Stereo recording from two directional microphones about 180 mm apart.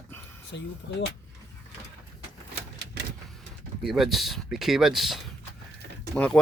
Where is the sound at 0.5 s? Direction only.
75° left (ahead or behind).